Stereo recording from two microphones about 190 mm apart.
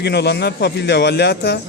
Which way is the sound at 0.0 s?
60° left (ahead or behind).